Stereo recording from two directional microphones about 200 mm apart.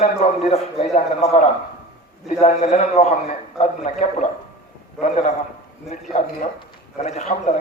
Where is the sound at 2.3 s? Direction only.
35° left (ahead or behind).